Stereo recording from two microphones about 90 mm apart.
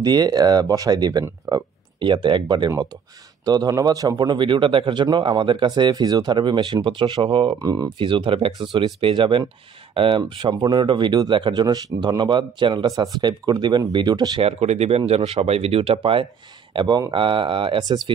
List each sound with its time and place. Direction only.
0.0 s speech: 50° right (ahead or behind)
2.0 s speech: 60° right (ahead or behind)
3.4 s speech: 45° right (ahead or behind); by 5.0 s 70° right (ahead or behind)
5.0 s speech: 55° right (ahead or behind)
7.6 s speech: 45° right (ahead or behind)
8.0 s speech: 70° right (ahead or behind)
11.6 s speech: 45° right (ahead or behind); by 12.8 s 65° right (ahead or behind)
12.8 s speech: 45° right (ahead or behind)
14.4 s speech: 90° right
15.4 s speech: 70° right (ahead or behind)
15.7 s speech: 90° right
16.7 s speech: 55° right (ahead or behind)
17.1 s speech: 70° right (ahead or behind)
17.8 s speech: 55° right (ahead or behind)